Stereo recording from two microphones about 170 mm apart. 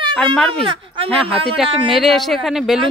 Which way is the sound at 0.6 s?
30° right (ahead or behind).